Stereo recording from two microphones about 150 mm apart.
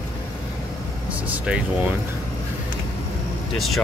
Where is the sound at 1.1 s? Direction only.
10° right (ahead or behind).